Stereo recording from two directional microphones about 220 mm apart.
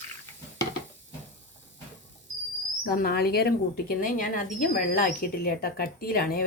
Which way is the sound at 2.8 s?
45° left (ahead or behind).